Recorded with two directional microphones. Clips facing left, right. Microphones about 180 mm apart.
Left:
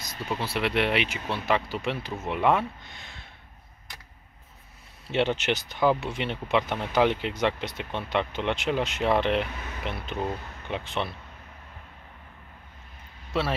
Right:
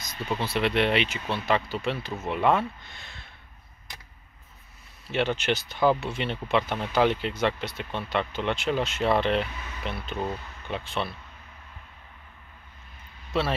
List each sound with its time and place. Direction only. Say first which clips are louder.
0.0 s speech: right 1 dB; 10° left (ahead or behind)
5.1 s speech: left 1 dB; 20° left (ahead or behind)